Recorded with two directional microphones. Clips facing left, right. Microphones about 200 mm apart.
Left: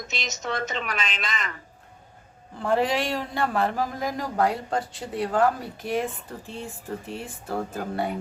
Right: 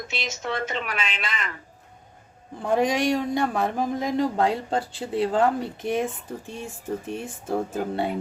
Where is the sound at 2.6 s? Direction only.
15° right (ahead or behind).